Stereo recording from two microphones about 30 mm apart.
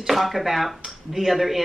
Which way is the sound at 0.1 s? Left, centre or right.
Centre.